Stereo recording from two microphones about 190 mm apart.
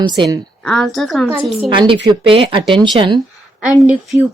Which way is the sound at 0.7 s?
Centre (ahead or behind).